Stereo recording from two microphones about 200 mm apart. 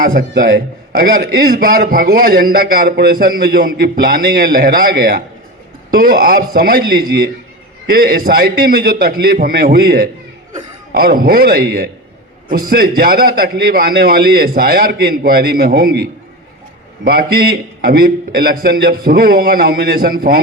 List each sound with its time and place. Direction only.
0.0 s a man's voice: 45° right (ahead or behind)